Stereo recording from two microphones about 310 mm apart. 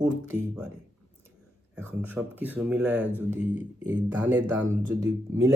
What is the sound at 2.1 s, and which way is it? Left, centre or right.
Speech, centre.